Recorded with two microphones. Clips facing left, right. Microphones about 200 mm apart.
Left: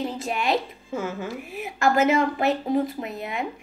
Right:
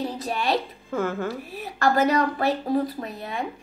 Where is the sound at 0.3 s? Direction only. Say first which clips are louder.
Even; 20° left (ahead or behind).